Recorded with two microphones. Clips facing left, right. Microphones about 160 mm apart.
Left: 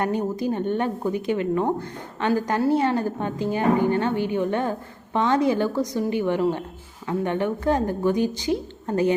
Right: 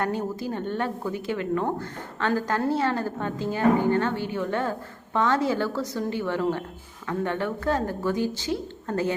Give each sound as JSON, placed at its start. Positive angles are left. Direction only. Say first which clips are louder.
{"t": 0.0, "sound": "a woman's voice", "louder": "left 4 dB", "side_deg": 20}